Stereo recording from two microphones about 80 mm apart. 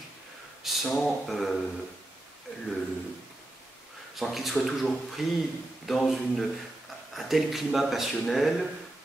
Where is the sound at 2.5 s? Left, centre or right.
Centre.